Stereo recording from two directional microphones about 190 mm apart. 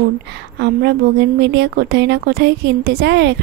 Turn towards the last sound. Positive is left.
turn(degrees=-60)  # may be behind; listen again after turning